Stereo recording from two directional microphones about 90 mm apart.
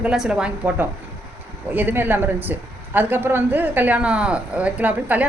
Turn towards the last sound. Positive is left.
turn(degrees=-15)  # may be behind; listen again after turning